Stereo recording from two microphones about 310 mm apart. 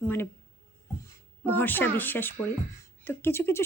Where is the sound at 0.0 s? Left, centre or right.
Centre.